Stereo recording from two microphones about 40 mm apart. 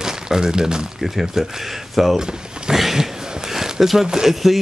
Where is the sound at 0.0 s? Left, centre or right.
Centre.